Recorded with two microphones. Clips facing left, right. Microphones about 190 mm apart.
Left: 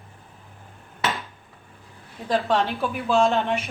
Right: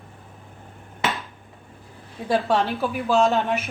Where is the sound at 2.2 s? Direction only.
5° right (ahead or behind).